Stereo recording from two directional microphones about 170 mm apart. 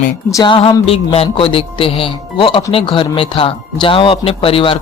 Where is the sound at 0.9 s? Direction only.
35° left (ahead or behind).